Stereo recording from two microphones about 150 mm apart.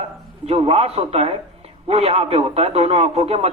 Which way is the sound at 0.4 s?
40° right (ahead or behind).